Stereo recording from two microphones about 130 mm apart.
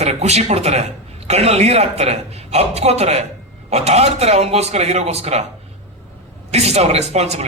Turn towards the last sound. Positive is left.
turn(degrees=-55)  # may be behind; listen again after turning